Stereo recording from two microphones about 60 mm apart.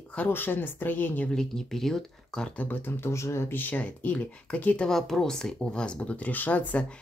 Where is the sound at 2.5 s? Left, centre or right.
Left.